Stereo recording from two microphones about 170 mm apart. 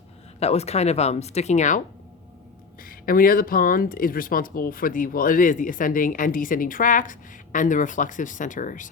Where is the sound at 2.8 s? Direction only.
55° left (ahead or behind).